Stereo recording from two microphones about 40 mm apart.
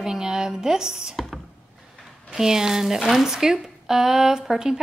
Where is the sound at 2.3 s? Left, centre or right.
Centre.